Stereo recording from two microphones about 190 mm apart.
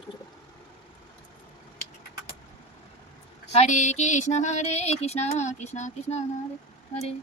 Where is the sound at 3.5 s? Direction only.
35° left (ahead or behind).